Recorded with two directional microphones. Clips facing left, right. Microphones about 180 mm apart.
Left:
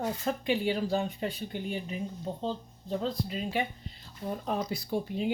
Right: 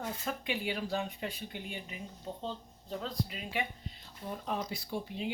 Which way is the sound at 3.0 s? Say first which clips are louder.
Left 5 dB; 35° left (ahead or behind).